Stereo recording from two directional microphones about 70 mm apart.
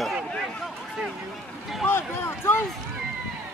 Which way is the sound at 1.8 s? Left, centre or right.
Left.